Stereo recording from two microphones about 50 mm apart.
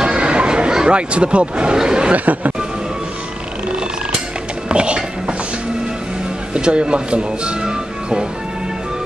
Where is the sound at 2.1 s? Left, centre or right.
Right.